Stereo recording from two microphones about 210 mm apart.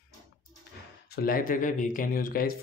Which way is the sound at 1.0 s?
45° left (ahead or behind).